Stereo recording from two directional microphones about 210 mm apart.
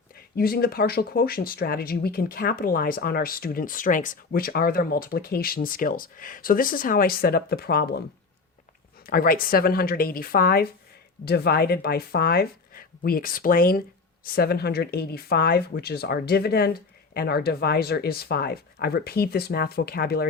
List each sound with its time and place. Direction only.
0.3 s speech: 45° left (ahead or behind)
9.0 s speech: 45° left (ahead or behind)